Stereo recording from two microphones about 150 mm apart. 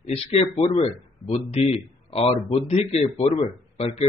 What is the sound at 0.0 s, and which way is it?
A man's voice, 45° left (ahead or behind).